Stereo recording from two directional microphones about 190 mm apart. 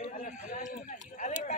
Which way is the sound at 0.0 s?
45° left (ahead or behind).